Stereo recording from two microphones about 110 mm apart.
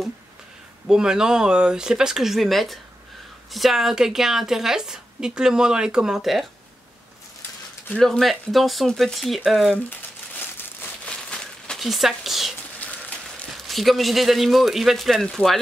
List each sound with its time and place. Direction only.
0.8 s a woman's voice: 5° right (ahead or behind)
7.9 s a woman's voice: 5° left (ahead or behind)
11.1 s crumpling: 10° left (ahead or behind)
12.8 s a sound: 15° left (ahead or behind)
13.7 s a woman's voice: centre (ahead or behind)